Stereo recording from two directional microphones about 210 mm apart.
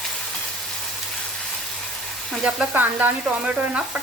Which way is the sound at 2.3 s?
5° right (ahead or behind).